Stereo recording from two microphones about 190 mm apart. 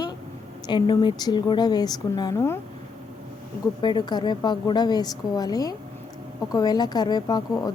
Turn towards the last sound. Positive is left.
turn(degrees=20)  # may be behind; listen again after turning